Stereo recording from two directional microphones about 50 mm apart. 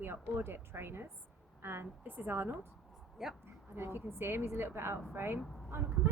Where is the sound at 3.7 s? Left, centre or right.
Right.